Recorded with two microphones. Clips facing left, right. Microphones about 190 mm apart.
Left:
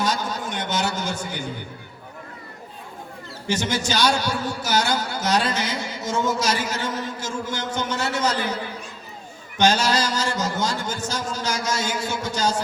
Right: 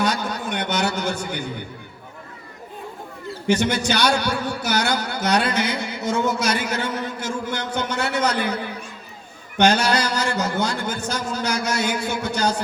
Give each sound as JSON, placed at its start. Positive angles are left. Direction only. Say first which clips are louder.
{"t": 0.0, "sound": "a sound", "louder": "right 2 dB", "side_deg": -60}
{"t": 3.4, "sound": "a man's voice", "louder": "right 5 dB", "side_deg": -60}
{"t": 9.6, "sound": "a man's voice", "louder": "right 2 dB", "side_deg": -60}